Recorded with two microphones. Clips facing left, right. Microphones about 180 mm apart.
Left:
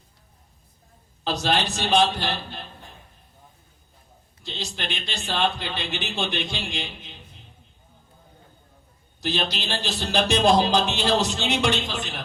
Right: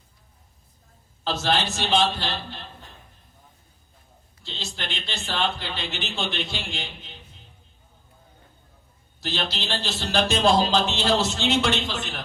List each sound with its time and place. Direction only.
1.2 s a man's voice: 15° left (ahead or behind)
4.4 s a man's voice: 15° left (ahead or behind)
9.2 s a man's voice: 15° left (ahead or behind)